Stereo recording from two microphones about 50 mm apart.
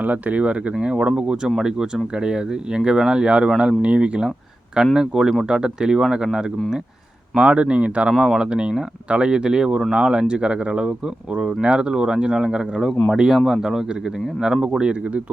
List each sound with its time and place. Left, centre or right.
0.0 s speech: right